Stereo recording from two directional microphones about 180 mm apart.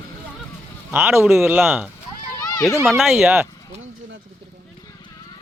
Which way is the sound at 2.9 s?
Centre (ahead or behind).